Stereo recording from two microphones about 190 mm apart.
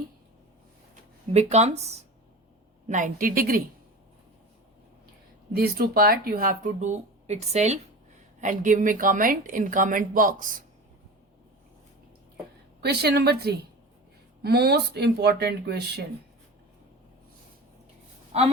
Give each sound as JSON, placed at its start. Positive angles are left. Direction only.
{"t": 1.3, "sound": "speech", "side_deg": -35}
{"t": 5.5, "sound": "speech", "side_deg": -55}
{"t": 12.8, "sound": "speech", "side_deg": -60}